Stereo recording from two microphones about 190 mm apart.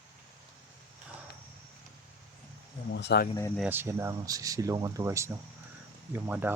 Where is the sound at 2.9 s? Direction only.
65° left (ahead or behind).